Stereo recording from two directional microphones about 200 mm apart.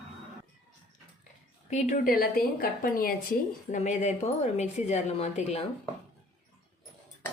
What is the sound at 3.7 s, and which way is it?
A woman's voice, 35° left (ahead or behind).